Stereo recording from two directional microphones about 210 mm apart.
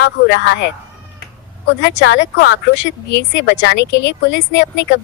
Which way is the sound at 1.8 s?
60° left (ahead or behind).